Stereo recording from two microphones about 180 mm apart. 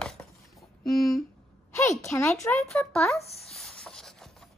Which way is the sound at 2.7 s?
Centre (ahead or behind).